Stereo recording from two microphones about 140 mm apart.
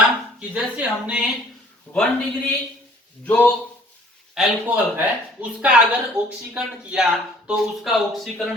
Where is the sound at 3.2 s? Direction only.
10° left (ahead or behind).